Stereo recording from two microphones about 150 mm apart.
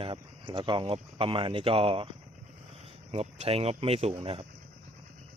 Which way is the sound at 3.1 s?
45° right (ahead or behind).